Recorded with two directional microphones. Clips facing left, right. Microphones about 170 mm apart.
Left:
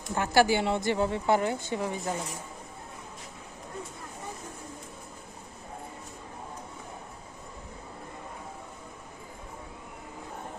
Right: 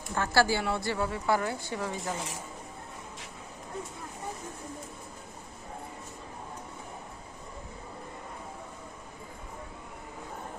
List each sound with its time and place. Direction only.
0.1 s a woman's voice: 20° left (ahead or behind)